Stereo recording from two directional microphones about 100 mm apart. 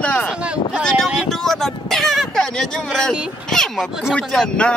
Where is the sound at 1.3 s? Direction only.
5° left (ahead or behind).